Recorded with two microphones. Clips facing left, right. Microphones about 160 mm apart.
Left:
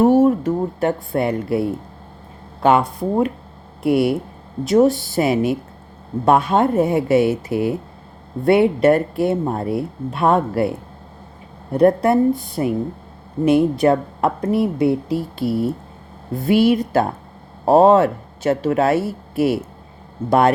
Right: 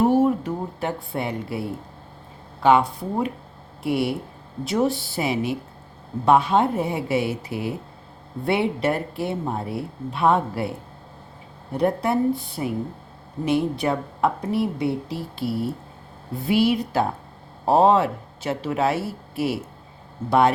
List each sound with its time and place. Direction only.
0.2 s speech: 45° left (ahead or behind)
2.6 s speech: 45° left (ahead or behind)
11.7 s speech: 50° left (ahead or behind)